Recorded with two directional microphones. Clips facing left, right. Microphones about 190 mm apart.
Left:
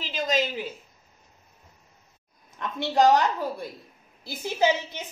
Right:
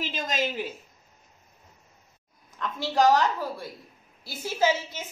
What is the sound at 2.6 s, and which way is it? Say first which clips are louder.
A woman's voice: left 2 dB; 20° left (ahead or behind).